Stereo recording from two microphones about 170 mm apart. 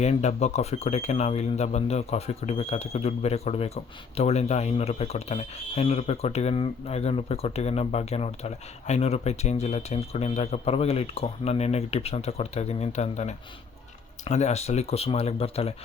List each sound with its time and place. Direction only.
0.0 s speech: 40° left (ahead or behind)